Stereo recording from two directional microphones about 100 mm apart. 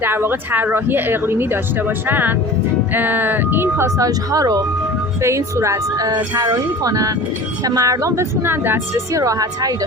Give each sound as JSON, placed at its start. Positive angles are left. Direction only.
{"t": 0.0, "sound": "a woman's voice", "side_deg": -20}